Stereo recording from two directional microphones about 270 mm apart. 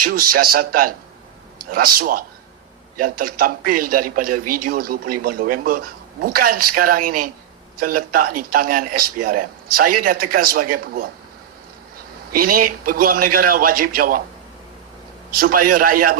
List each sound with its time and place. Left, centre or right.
0.0 s a man's voice: right
12.3 s a man's voice: right
15.3 s a man's voice: right